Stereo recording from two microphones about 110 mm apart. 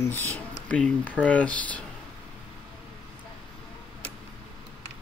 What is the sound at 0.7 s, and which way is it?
Speech, 10° left (ahead or behind).